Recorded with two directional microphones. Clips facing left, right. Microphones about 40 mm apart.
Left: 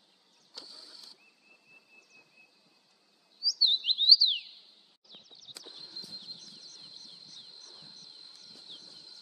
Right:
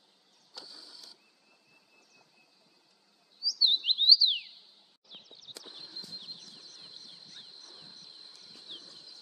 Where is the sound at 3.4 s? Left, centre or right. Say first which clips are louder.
Even; centre.